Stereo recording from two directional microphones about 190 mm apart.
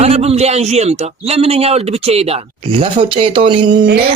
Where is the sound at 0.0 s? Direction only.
30° right (ahead or behind).